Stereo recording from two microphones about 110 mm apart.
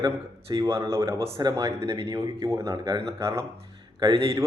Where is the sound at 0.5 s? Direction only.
25° right (ahead or behind).